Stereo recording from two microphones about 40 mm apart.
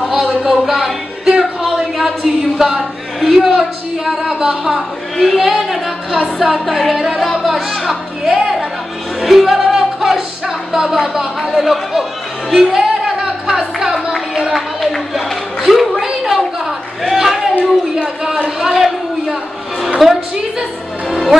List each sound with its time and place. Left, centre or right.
0.4 s a sound: centre
3.2 s a woman's voice: centre
5.1 s speech: centre
5.5 s a woman's voice: centre
6.5 s speech: centre
9.7 s music: centre
11.5 s speech: centre
13.0 s music: centre
14.8 s speech: centre
15.7 s a sound: centre
17.6 s speech: right
18.6 s a man's voice: centre
21.1 s music: centre